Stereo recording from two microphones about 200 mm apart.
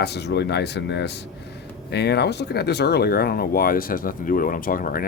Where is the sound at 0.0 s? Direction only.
55° left (ahead or behind).